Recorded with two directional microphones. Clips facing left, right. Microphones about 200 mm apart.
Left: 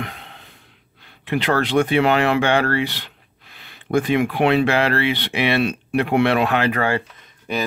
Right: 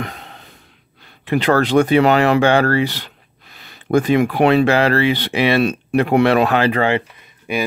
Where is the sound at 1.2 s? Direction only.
40° right (ahead or behind).